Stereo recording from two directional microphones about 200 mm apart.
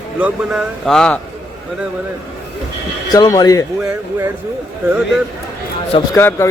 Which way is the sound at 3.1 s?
20° left (ahead or behind).